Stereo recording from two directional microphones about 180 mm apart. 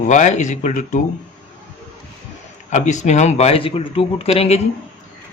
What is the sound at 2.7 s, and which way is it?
A man's voice, 40° left (ahead or behind).